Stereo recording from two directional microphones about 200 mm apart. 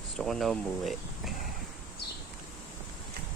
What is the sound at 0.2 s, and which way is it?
Speech, centre (ahead or behind).